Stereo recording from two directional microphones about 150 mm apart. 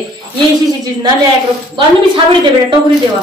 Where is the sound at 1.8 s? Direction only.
30° right (ahead or behind).